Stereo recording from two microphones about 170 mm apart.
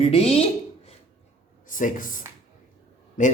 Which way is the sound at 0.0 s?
35° left (ahead or behind).